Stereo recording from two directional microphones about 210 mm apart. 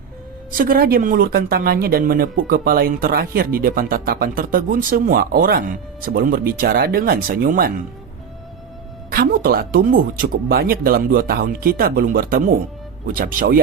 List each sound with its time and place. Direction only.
0.5 s speech: 45° right (ahead or behind)
9.0 s speech: 45° right (ahead or behind)